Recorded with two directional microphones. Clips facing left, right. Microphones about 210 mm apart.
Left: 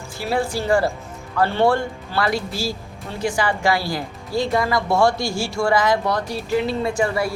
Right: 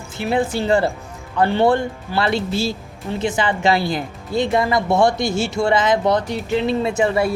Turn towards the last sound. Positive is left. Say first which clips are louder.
# right 3 dB
turn(degrees=-25)  # may be behind; listen again after turning